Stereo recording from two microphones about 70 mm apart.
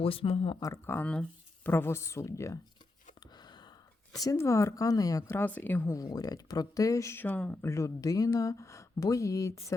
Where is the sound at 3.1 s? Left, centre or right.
Left.